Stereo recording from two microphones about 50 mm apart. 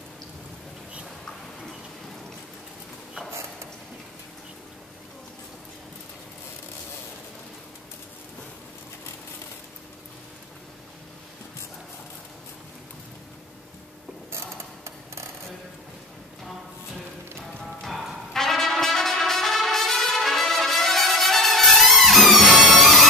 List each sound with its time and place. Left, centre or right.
18.3 s brass instrument: centre